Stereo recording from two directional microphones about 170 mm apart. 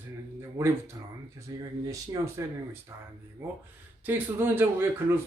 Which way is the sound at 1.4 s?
20° right (ahead or behind).